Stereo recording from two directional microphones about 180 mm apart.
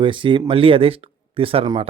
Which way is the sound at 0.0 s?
25° right (ahead or behind).